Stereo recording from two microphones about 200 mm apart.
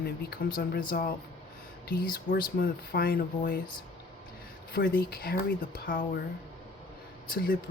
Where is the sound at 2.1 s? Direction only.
45° left (ahead or behind).